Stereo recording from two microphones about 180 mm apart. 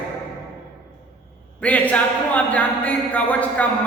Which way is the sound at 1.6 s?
10° left (ahead or behind).